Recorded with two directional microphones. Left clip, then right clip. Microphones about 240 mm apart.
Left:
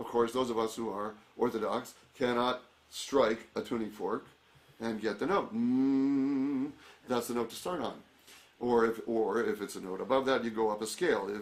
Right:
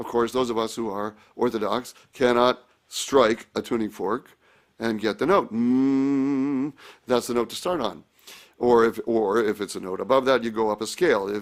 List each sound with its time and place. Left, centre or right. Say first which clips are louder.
0.0 s speech: right 7 dB; right